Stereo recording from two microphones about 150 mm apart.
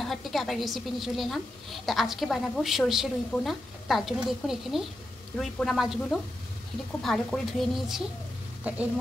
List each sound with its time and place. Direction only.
0.0 s a woman's voice: centre (ahead or behind)